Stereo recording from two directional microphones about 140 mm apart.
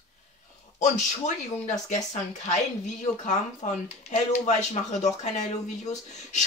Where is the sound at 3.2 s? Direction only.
60° left (ahead or behind).